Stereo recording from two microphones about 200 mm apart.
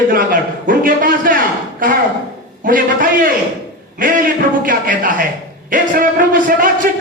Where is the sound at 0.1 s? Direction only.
45° right (ahead or behind).